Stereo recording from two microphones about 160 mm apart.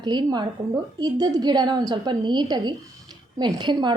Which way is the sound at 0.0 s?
25° right (ahead or behind).